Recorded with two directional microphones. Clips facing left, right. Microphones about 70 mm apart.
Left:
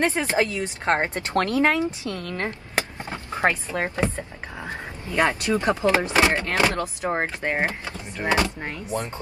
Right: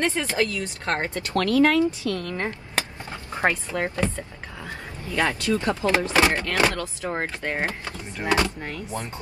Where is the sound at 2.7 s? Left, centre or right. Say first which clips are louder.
Left 2 dB; left.